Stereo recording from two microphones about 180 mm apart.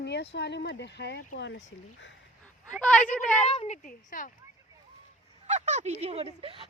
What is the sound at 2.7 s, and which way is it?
Speech, 5° left (ahead or behind).